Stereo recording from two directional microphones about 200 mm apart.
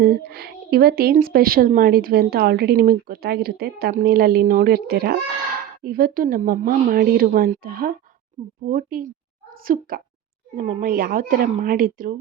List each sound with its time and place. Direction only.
0.0 s a woman's voice: 50° right (ahead or behind)